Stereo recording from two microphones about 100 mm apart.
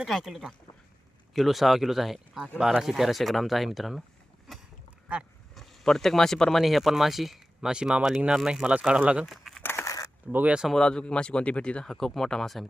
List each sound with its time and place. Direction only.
0.0 s speech: 5° right (ahead or behind)
5.5 s speech: 5° left (ahead or behind)
9.6 s crushing: 30° left (ahead or behind)
10.3 s speech: 10° right (ahead or behind)
10.8 s speech: 10° left (ahead or behind)